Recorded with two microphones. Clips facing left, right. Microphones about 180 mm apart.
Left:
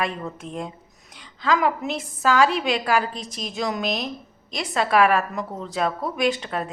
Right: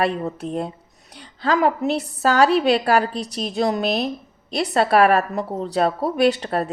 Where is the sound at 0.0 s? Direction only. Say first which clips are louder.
Right 6 dB; 35° right (ahead or behind).